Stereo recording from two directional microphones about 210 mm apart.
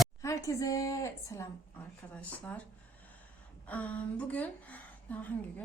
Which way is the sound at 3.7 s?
5° left (ahead or behind).